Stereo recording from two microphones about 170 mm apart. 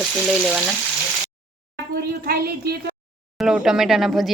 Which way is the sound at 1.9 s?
65° right (ahead or behind).